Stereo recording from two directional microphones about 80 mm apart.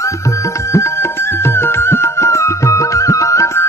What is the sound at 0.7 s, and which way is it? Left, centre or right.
Music, left.